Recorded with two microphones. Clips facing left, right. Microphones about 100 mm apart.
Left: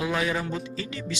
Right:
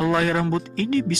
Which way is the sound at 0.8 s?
55° right (ahead or behind).